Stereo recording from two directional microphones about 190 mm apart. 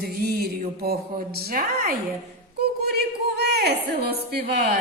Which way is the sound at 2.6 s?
55° right (ahead or behind).